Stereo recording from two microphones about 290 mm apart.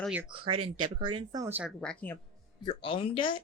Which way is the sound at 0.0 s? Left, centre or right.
Centre.